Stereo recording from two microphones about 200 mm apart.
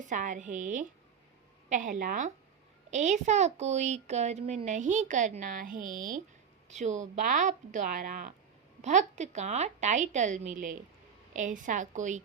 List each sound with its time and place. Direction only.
0.0 s speech: 40° right (ahead or behind)